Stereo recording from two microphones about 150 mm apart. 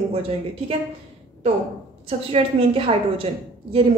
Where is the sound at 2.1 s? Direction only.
40° right (ahead or behind).